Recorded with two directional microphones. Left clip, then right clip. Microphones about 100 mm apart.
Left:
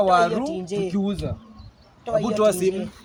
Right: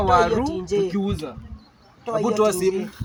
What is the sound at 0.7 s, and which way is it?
A man's voice, 35° left (ahead or behind).